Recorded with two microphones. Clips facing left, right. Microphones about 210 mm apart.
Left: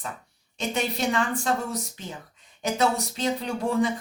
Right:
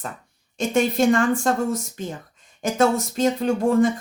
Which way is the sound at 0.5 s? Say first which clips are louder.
Right 8 dB; 50° right (ahead or behind).